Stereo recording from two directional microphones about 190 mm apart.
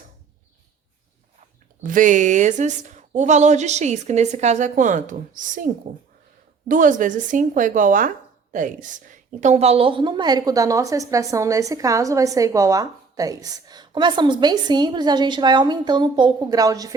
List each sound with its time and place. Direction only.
1.8 s a woman's voice: 45° right (ahead or behind); by 16.9 s 20° right (ahead or behind)